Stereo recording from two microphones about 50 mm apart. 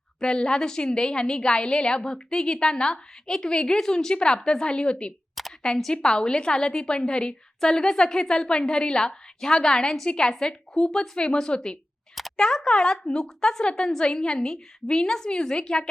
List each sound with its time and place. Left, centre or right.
0.2 s a woman's voice: centre
5.3 s a sound: centre
5.6 s a woman's voice: centre